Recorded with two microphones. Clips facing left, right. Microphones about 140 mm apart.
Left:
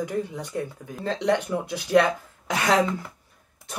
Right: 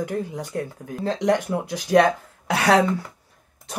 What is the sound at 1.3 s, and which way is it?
Speech, 15° right (ahead or behind).